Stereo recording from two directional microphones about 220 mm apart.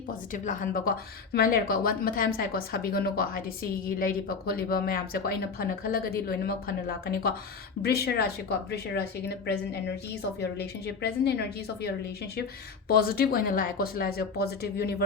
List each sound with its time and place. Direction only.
0.3 s a woman's voice: 35° left (ahead or behind)
10.4 s speech: 45° left (ahead or behind)